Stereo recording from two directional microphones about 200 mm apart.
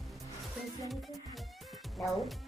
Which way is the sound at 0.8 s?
Centre (ahead or behind).